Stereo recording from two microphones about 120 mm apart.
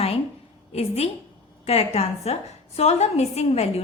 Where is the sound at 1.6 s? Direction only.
60° left (ahead or behind).